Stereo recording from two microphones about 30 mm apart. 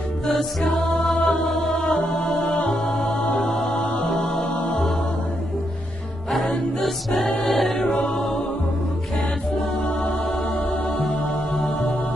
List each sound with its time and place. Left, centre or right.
0.3 s music: centre
3.7 s music: left
4.1 s music: centre
6.8 s music: centre
11.1 s music: left